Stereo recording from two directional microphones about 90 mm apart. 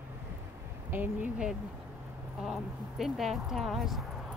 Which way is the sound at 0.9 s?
20° right (ahead or behind).